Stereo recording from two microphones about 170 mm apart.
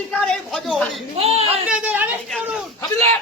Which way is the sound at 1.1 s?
35° right (ahead or behind).